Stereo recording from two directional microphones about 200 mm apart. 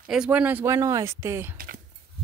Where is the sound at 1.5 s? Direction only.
45° right (ahead or behind).